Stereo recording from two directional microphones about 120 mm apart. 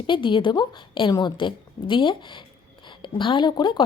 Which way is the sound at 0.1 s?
45° left (ahead or behind).